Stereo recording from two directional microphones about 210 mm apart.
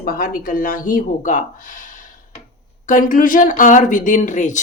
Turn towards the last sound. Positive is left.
turn(degrees=35)  # may be behind; listen again after turning